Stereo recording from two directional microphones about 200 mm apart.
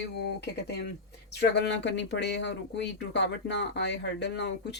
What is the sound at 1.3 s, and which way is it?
Speech, 55° left (ahead or behind).